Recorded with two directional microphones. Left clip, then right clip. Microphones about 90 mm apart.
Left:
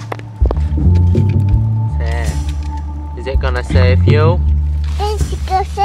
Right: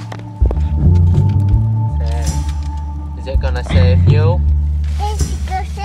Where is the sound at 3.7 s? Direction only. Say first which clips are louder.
Left 1 dB; 30° right (ahead or behind).